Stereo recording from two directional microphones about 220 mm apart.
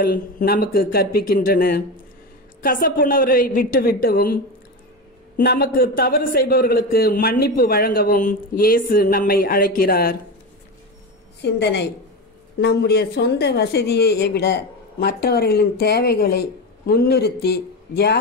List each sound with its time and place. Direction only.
0.0 s a man's voice: 40° left (ahead or behind)
5.4 s a man's voice: 45° left (ahead or behind)
11.4 s speech: 50° left (ahead or behind)